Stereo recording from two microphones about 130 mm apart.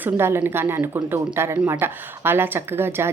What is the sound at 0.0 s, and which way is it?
Speech, 20° right (ahead or behind).